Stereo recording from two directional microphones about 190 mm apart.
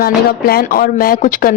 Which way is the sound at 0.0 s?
55° left (ahead or behind).